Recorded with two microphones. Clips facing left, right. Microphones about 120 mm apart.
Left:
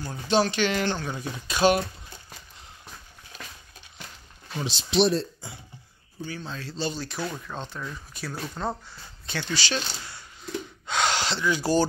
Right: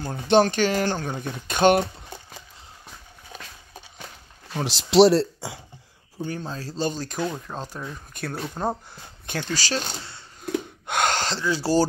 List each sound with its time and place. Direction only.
0.0 s speech: 50° right (ahead or behind)
4.6 s speech: 90° right
6.2 s speech: 45° right (ahead or behind)
7.2 s speech: 20° right (ahead or behind)
8.1 s speech: 55° right (ahead or behind)
8.5 s speech: 15° right (ahead or behind)
8.9 s speech: 50° right (ahead or behind)
10.4 s gasp: 50° right (ahead or behind)
11.4 s speech: 30° right (ahead or behind)